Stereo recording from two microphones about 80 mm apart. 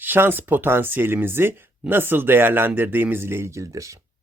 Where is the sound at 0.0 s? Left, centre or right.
Right.